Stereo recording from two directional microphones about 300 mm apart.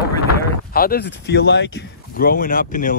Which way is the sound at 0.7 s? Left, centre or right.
Left.